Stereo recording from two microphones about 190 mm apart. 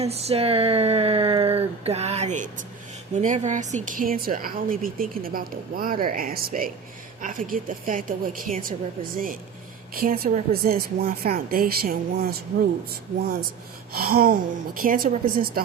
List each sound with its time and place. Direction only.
0.0 s a sound: 35° right (ahead or behind)
3.2 s speech: 40° right (ahead or behind)
13.9 s speech: 50° right (ahead or behind)